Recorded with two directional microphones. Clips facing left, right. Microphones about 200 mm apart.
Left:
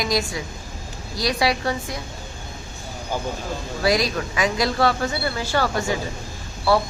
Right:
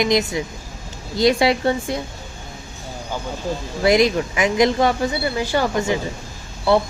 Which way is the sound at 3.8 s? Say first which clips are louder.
Right 5 dB; 20° right (ahead or behind).